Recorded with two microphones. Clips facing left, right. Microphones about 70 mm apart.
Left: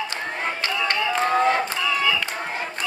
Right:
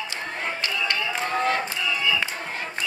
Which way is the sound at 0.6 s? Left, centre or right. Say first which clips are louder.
Left 4 dB; left.